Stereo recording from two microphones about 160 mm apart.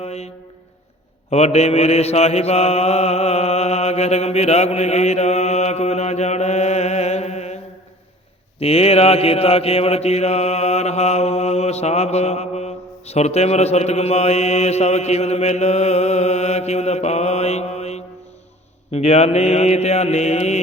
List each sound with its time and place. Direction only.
0.0 s music: 40° left (ahead or behind)
1.3 s mantra: 40° left (ahead or behind)